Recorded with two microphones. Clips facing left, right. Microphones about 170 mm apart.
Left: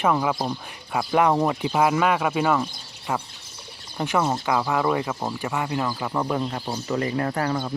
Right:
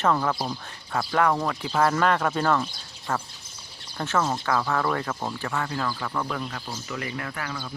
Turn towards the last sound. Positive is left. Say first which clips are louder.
# left 9 dB
turn(degrees=35)  # may be behind; listen again after turning